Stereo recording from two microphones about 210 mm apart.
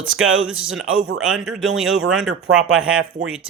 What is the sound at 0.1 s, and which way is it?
Speech, 70° right (ahead or behind).